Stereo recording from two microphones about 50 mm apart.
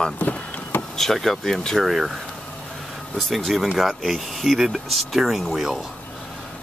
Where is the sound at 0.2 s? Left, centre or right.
Left.